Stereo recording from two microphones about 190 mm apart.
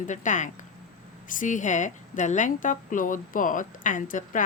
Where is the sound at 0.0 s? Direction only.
40° left (ahead or behind).